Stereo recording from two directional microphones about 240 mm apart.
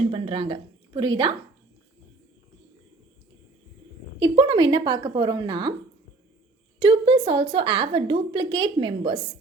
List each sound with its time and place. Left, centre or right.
0.1 s a woman's voice: right
4.2 s a woman's voice: centre
6.7 s a woman's voice: right